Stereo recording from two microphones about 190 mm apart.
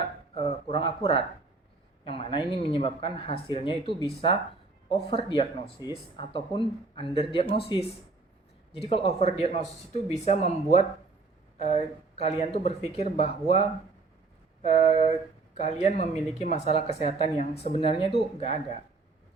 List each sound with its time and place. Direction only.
0.3 s speech: 30° left (ahead or behind)